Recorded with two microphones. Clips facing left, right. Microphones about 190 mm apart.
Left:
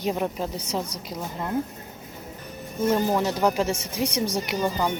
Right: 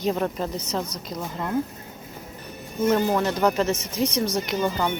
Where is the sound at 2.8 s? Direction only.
10° left (ahead or behind).